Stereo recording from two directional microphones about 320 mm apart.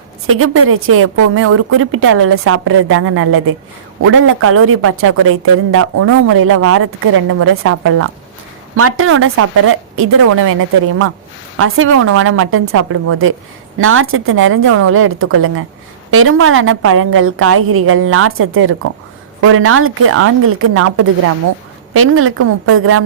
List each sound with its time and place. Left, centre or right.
0.3 s speech: right